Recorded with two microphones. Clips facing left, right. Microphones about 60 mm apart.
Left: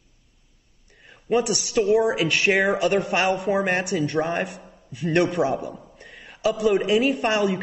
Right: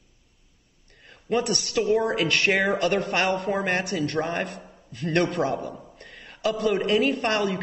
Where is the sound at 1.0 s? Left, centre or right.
Centre.